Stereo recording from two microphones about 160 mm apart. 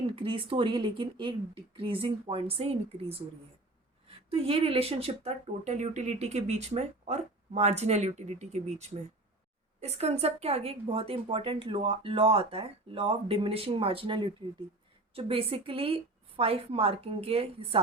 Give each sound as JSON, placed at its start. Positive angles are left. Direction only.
{"t": 0.2, "sound": "a woman's voice", "side_deg": -35}
{"t": 4.3, "sound": "a woman's voice", "side_deg": -40}